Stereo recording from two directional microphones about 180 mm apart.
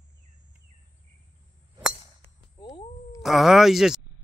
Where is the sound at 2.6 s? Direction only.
20° left (ahead or behind).